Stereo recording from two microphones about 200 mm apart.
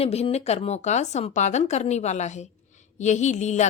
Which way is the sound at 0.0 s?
30° left (ahead or behind).